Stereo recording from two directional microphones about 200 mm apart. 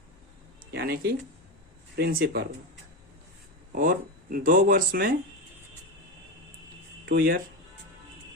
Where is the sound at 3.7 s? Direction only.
45° right (ahead or behind).